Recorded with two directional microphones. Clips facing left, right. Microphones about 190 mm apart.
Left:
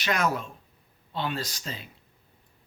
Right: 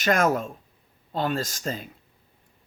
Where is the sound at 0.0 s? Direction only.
50° right (ahead or behind).